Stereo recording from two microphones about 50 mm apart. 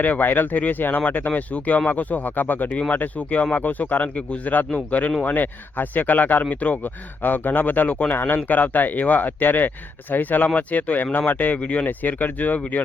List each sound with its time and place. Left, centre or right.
0.0 s speech: left